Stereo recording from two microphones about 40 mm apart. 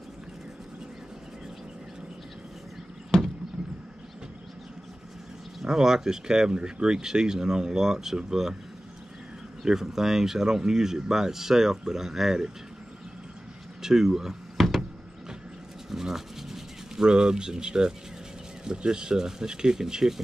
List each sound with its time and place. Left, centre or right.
3.1 s a sound: centre
5.6 s speech: centre
9.6 s speech: centre
13.8 s speech: centre
14.6 s power windows: centre
15.9 s rub: centre
18.6 s speech: centre